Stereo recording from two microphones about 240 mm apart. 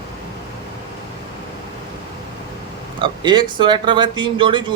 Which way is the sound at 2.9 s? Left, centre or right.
Centre.